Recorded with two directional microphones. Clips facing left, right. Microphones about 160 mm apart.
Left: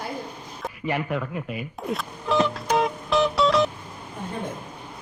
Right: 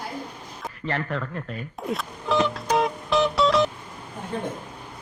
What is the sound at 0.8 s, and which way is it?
Speech, 10° left (ahead or behind).